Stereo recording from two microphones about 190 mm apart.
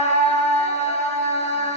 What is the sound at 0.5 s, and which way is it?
Music, 35° left (ahead or behind).